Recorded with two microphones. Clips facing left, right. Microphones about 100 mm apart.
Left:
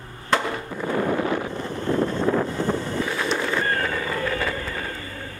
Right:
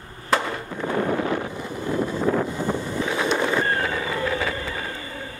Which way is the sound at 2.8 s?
10° right (ahead or behind).